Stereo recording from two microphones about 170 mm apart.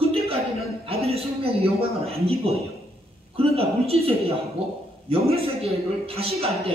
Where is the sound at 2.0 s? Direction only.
35° right (ahead or behind).